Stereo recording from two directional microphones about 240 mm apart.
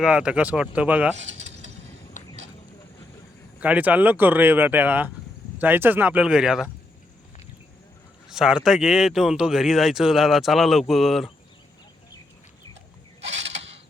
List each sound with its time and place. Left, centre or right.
0.0 s speech: centre
1.1 s speech: right
2.2 s a sound: left
3.6 s speech: centre
8.3 s speech: centre